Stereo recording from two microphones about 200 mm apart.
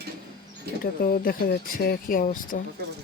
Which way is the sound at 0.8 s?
45° left (ahead or behind).